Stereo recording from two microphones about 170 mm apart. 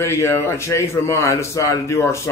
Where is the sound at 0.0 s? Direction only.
15° left (ahead or behind).